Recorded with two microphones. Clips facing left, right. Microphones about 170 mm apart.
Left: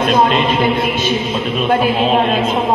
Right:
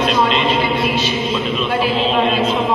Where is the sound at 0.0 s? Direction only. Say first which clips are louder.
Left 3 dB; 50° left (ahead or behind).